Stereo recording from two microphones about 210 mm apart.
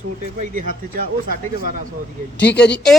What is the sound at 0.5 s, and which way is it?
Speech, 40° right (ahead or behind).